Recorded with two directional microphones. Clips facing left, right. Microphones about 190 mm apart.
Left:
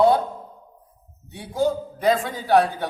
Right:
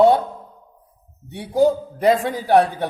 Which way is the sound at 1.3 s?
70° right (ahead or behind).